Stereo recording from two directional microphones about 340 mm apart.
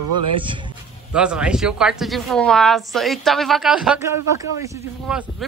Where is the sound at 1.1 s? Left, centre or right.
Centre.